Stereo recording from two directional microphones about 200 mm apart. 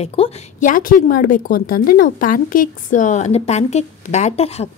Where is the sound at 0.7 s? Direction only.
45° left (ahead or behind).